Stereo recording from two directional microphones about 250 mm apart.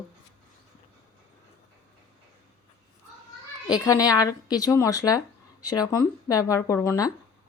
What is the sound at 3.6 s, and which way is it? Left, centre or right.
Speech, centre.